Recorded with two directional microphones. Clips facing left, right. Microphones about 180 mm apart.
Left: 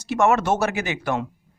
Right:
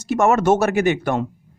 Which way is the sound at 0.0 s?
45° right (ahead or behind).